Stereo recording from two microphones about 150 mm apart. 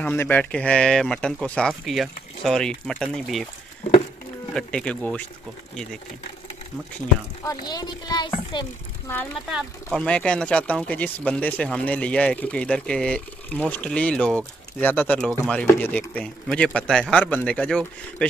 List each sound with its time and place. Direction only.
0.0 s speech: 10° left (ahead or behind)
4.6 s speech: 5° left (ahead or behind)
7.4 s a child's voice: 25° left (ahead or behind)
9.5 s speech: 5° right (ahead or behind)
10.0 s speech: 5° left (ahead or behind)